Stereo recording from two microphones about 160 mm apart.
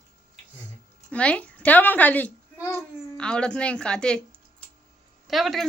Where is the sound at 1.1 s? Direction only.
10° left (ahead or behind).